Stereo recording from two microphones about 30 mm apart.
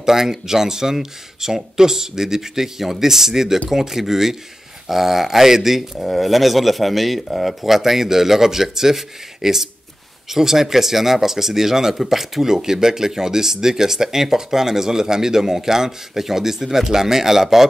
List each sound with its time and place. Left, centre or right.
0.0 s speech: centre
5.9 s speech: centre